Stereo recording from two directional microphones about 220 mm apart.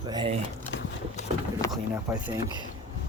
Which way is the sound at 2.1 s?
15° right (ahead or behind).